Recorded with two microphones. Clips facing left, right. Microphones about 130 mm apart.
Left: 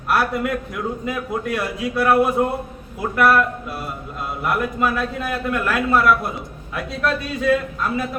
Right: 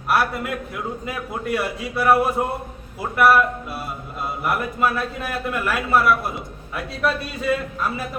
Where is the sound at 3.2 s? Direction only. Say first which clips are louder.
Even; 5° right (ahead or behind).